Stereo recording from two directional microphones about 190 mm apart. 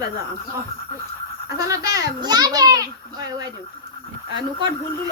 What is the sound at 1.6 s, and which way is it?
A child's voice, 20° right (ahead or behind).